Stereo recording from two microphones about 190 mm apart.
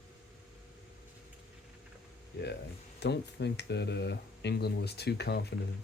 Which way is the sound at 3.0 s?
65° left (ahead or behind).